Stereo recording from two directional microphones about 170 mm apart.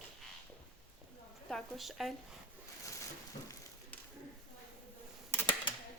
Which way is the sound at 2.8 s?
20° left (ahead or behind).